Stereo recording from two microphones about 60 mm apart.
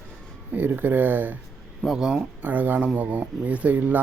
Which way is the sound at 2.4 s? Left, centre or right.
Right.